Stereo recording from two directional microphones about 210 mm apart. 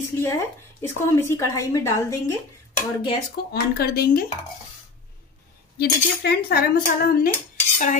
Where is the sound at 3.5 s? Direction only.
50° left (ahead or behind).